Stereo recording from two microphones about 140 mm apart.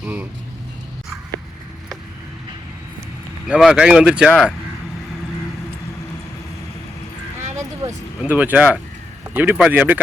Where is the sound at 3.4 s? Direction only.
5° right (ahead or behind).